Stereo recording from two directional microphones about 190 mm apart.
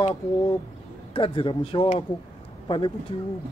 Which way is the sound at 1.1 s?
25° left (ahead or behind).